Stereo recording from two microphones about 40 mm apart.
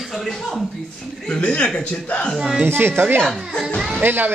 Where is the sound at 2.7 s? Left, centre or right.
Right.